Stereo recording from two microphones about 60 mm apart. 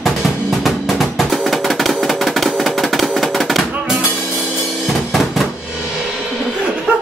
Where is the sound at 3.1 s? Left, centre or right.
Centre.